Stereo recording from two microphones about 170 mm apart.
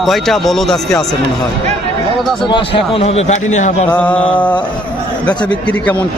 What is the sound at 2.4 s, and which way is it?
A man's voice, 30° left (ahead or behind).